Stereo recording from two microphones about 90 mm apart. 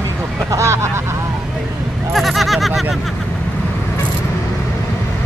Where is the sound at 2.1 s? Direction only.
Centre (ahead or behind).